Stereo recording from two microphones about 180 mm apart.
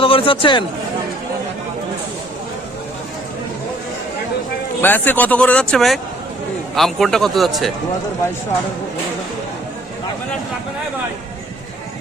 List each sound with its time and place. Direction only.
0.0 s speech: 30° left (ahead or behind)
4.8 s a man's voice: 10° left (ahead or behind)